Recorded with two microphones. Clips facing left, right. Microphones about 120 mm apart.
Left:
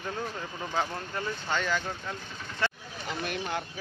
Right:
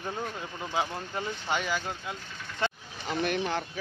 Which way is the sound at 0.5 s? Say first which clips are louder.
Even; centre (ahead or behind).